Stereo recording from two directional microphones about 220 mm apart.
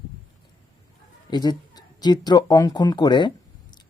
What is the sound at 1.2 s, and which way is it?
Speech, 20° left (ahead or behind).